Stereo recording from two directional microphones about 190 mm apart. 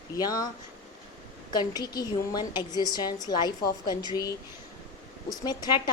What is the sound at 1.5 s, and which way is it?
A woman's voice, 20° left (ahead or behind).